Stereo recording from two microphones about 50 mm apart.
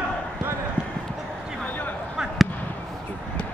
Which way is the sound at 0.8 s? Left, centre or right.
Centre.